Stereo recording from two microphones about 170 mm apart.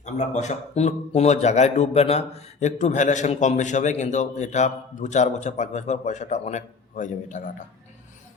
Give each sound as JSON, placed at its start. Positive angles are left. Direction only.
{"t": 0.0, "sound": "speech", "side_deg": 45}